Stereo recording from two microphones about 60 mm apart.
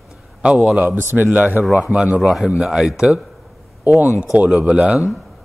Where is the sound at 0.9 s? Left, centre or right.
Right.